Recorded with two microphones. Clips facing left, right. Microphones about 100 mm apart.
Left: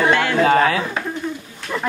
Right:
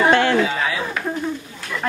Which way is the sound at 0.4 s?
55° left (ahead or behind).